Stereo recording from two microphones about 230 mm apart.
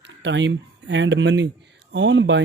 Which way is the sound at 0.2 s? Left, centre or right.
Right.